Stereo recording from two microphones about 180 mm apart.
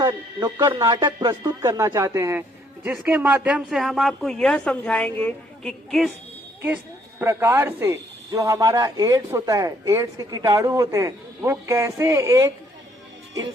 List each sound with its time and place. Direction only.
0.0 s speech: 20° right (ahead or behind); by 6.1 s centre (ahead or behind)
7.2 s a man's voice: 15° right (ahead or behind)